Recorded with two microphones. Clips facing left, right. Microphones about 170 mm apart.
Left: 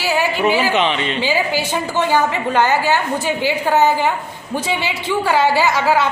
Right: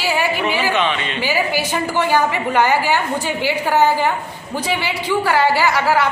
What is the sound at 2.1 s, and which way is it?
Speech, 10° right (ahead or behind).